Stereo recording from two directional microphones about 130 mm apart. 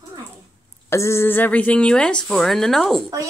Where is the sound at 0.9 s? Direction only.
20° left (ahead or behind); by 3.1 s centre (ahead or behind).